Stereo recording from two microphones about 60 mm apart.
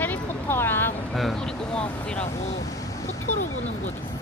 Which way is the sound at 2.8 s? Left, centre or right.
Left.